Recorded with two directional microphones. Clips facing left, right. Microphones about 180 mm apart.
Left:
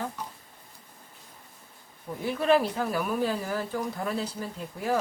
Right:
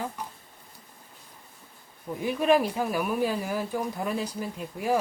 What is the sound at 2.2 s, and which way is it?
Speech, 15° right (ahead or behind).